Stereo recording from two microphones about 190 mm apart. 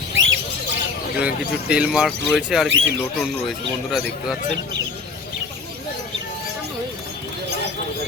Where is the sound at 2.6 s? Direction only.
75° right (ahead or behind).